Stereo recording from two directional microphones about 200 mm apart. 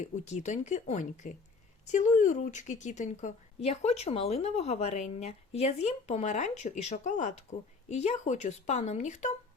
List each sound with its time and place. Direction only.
0.0 s a woman's voice: 35° left (ahead or behind)